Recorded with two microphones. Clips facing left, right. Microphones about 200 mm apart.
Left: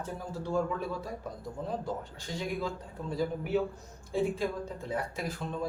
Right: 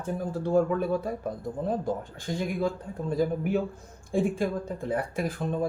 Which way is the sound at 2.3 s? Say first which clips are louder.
Right 6 dB; 50° right (ahead or behind).